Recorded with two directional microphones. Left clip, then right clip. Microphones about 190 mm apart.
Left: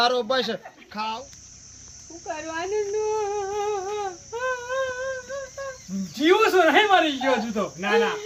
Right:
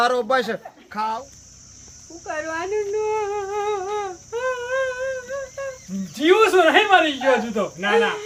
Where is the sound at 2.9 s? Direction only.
5° left (ahead or behind).